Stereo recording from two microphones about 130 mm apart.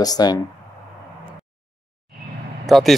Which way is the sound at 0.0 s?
30° left (ahead or behind).